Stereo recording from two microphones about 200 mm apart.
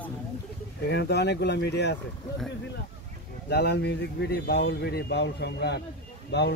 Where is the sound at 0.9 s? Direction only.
60° left (ahead or behind).